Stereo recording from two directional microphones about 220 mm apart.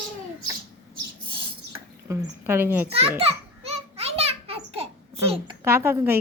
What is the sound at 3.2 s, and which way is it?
Babbling, 25° right (ahead or behind).